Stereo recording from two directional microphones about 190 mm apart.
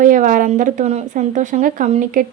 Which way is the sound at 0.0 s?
45° right (ahead or behind).